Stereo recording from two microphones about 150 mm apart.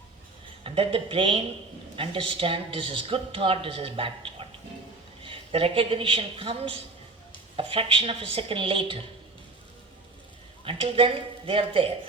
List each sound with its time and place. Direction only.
0.6 s a woman's voice: 40° right (ahead or behind)
10.6 s speech: 35° right (ahead or behind)